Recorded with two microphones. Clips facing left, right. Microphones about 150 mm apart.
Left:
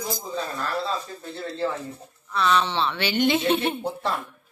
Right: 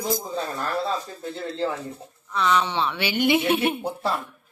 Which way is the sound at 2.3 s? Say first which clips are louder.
Even; 15° right (ahead or behind).